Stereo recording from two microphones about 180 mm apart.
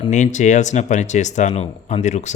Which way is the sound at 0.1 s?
40° left (ahead or behind).